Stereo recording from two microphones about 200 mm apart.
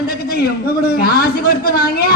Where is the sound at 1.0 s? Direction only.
50° left (ahead or behind).